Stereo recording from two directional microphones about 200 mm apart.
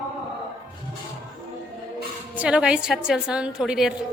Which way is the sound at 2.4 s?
5° right (ahead or behind).